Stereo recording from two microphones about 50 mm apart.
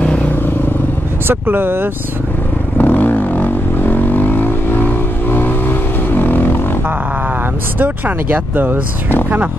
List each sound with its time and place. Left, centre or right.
0.0 s vehicle: left
1.2 s speech: right
2.8 s vehicle: left
7.8 s speech: right